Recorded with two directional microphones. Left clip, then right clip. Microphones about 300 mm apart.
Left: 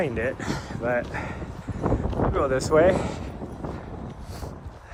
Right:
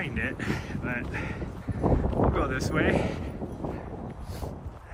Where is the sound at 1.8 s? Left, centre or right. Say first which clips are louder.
Even; right.